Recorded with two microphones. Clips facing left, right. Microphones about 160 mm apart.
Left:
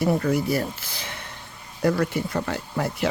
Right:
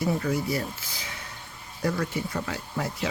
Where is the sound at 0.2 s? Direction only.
55° left (ahead or behind).